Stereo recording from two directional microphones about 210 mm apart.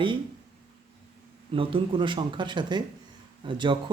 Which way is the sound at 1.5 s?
25° right (ahead or behind).